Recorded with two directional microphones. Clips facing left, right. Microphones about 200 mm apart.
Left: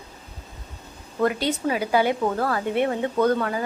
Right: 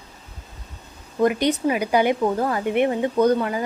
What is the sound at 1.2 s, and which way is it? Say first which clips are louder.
Speech: right 4 dB; 15° right (ahead or behind).